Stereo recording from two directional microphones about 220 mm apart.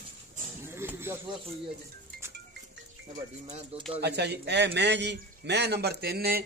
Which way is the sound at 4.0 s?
50° right (ahead or behind).